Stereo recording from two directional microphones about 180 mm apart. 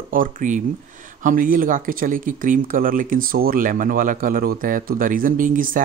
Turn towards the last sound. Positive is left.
turn(degrees=-50)  # may be behind; listen again after turning